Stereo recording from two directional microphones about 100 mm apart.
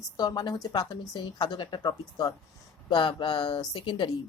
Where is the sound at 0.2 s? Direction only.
45° left (ahead or behind).